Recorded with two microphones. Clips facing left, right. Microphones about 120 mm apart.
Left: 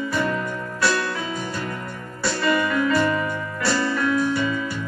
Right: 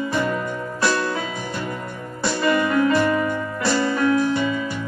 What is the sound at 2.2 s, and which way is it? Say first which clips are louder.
Music: right 2 dB; 25° right (ahead or behind).